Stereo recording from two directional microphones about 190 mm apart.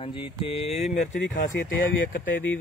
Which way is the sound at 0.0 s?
25° left (ahead or behind).